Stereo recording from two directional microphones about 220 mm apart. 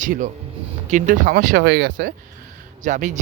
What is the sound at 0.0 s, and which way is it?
Speech, 35° right (ahead or behind).